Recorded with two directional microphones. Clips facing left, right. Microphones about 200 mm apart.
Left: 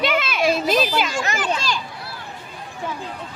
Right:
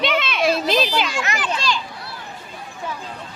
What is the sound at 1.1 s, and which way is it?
Speech, 45° left (ahead or behind).